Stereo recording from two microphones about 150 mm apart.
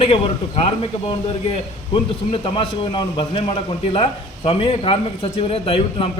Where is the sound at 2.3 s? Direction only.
40° left (ahead or behind).